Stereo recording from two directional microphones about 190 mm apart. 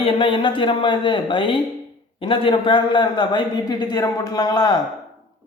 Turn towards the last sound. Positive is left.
turn(degrees=20)  # may be behind; listen again after turning